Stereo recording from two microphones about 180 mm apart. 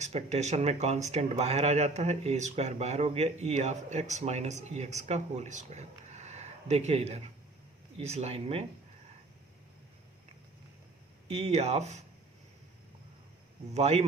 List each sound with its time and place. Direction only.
0.0 s speech: 40° right (ahead or behind)
11.3 s speech: 35° right (ahead or behind)
13.7 s speech: 35° right (ahead or behind)